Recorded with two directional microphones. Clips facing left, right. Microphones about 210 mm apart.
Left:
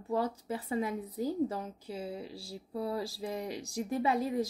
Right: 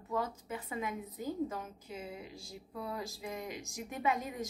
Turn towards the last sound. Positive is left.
turn(degrees=35)  # may be behind; listen again after turning